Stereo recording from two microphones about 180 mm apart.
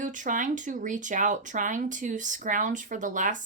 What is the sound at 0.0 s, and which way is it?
Speech, 45° right (ahead or behind).